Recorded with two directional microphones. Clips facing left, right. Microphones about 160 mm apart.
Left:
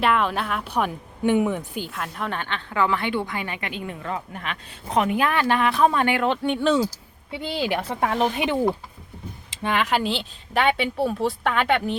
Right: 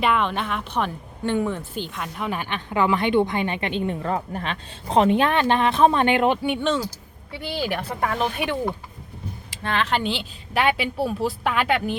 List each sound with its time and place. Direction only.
0.0 s speech: centre (ahead or behind)
6.7 s a woman's voice: 20° left (ahead or behind)
10.0 s a woman's voice: centre (ahead or behind)